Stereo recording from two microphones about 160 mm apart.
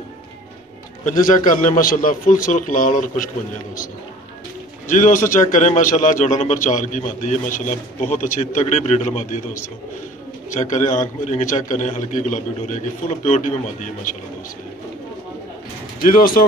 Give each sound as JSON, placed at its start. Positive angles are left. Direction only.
{"t": 1.0, "sound": "a man's voice", "side_deg": 55}
{"t": 4.8, "sound": "a man's voice", "side_deg": 50}
{"t": 16.0, "sound": "a man's voice", "side_deg": 60}